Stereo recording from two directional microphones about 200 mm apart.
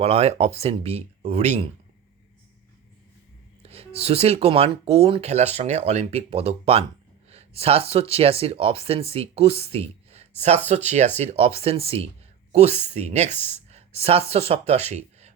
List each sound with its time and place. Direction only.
0.0 s speech: 30° right (ahead or behind)
3.6 s speech: 30° right (ahead or behind)